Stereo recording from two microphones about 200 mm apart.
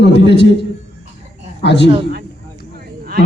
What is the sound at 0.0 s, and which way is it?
Speech, 60° left (ahead or behind).